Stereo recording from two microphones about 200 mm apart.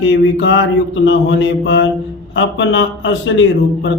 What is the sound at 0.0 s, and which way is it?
A man's voice, 70° left (ahead or behind).